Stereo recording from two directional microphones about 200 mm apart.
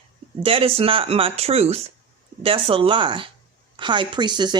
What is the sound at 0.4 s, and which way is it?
Speech, 30° right (ahead or behind).